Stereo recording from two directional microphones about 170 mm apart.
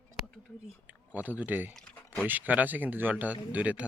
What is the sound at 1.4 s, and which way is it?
Speech, 10° right (ahead or behind).